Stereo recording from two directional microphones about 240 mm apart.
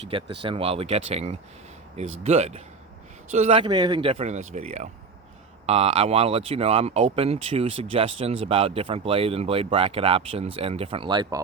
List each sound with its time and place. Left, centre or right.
0.1 s speech: right